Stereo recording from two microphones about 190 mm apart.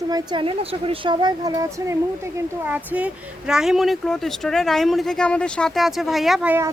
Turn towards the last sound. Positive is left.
turn(degrees=-10)  # may be behind; listen again after turning